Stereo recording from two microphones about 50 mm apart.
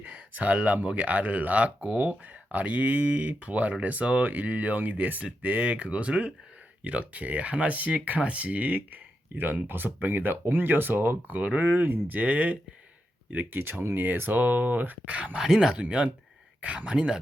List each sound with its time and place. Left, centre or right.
0.0 s speech: right
11.6 s speech: right
13.3 s speech: right
15.4 s speech: centre